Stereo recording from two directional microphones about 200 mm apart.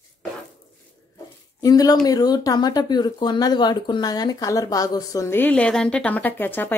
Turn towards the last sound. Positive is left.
turn(degrees=10)  # may be behind; listen again after turning